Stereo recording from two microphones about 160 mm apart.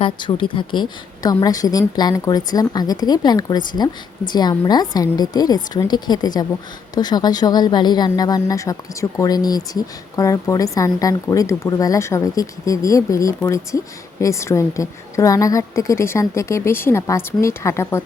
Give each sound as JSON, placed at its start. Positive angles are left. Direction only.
{"t": 0.0, "sound": "a woman's voice", "side_deg": 30}